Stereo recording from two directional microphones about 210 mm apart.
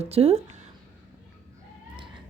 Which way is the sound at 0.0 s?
30° right (ahead or behind).